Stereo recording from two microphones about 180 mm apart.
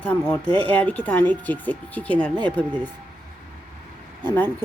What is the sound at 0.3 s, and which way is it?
Speech, 10° left (ahead or behind).